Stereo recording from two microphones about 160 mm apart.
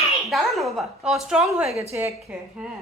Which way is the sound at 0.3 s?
Centre (ahead or behind).